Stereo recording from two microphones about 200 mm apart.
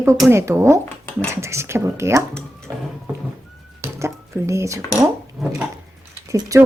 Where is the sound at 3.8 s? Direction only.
15° right (ahead or behind).